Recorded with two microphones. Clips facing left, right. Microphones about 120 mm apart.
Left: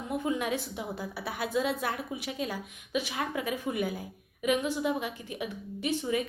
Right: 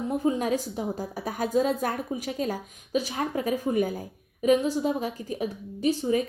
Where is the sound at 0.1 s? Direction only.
35° right (ahead or behind).